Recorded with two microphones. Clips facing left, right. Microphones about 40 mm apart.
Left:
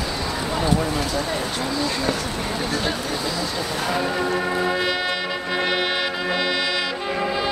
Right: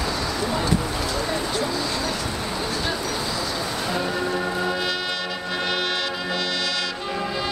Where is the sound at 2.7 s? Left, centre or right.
Left.